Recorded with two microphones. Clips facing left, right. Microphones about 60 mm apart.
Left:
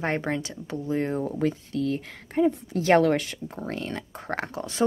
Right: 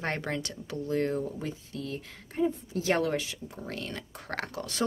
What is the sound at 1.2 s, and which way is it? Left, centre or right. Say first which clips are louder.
Speech: left 8 dB; left.